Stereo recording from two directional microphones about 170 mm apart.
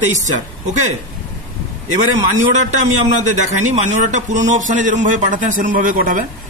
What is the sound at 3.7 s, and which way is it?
A man's voice, 45° right (ahead or behind).